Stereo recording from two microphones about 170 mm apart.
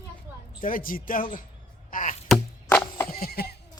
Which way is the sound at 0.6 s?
55° left (ahead or behind).